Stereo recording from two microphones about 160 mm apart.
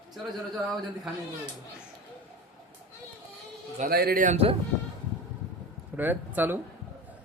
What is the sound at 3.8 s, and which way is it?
Speech, 70° right (ahead or behind).